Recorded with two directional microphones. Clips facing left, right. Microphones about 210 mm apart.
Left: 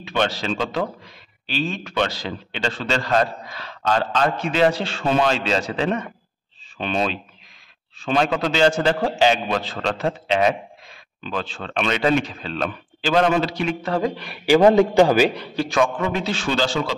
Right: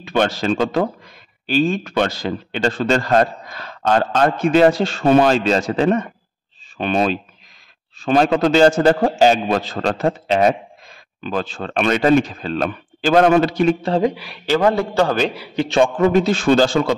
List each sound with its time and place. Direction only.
0.0 s speech: 45° right (ahead or behind)
13.8 s a man's voice: 25° right (ahead or behind)
14.1 s speech: centre (ahead or behind)
14.4 s a man's voice: 15° left (ahead or behind)
15.5 s a man's voice: 25° right (ahead or behind)
16.0 s speech: 40° right (ahead or behind)